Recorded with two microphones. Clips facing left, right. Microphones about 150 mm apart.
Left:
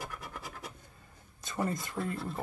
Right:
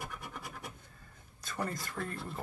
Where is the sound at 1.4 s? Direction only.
20° left (ahead or behind).